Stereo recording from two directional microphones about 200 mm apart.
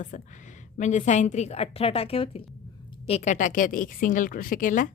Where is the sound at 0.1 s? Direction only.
40° left (ahead or behind).